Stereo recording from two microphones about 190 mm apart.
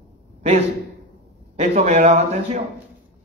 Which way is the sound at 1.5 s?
35° right (ahead or behind).